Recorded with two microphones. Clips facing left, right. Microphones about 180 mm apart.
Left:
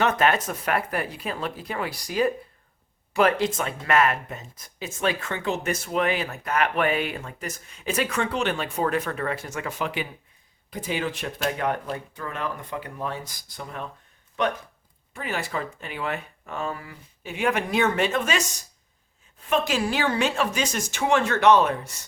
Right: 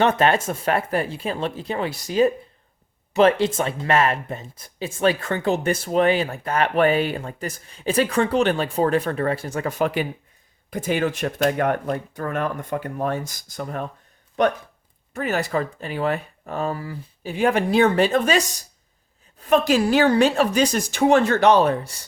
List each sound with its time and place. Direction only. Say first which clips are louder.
0.0 s speech: right 4 dB; 30° right (ahead or behind); by 13.9 s 45° right (ahead or behind)
15.1 s speech: right 7 dB; 45° right (ahead or behind)
19.5 s speech: right 6 dB; 40° right (ahead or behind)